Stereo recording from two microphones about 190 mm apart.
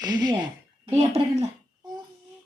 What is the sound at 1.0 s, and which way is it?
Speech, 30° right (ahead or behind).